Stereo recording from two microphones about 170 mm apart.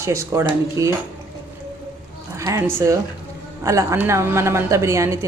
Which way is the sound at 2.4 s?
15° right (ahead or behind).